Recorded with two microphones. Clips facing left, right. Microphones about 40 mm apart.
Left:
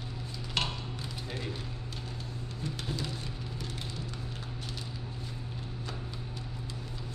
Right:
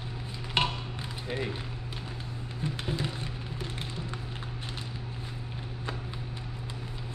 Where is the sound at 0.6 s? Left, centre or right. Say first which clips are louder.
Right 5 dB; right.